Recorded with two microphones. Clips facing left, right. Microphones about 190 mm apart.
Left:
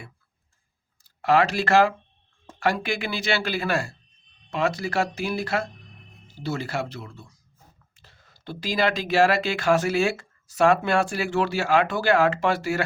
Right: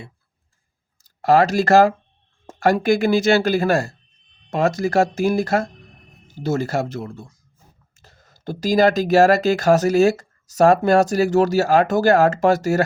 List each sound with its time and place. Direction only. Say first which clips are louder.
1.0 s speech: right 5 dB; 40° right (ahead or behind)